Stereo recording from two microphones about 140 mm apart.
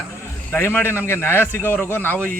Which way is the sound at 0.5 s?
15° left (ahead or behind).